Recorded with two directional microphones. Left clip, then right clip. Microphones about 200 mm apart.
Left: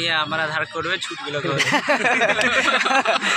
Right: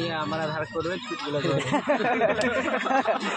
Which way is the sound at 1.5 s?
20° left (ahead or behind).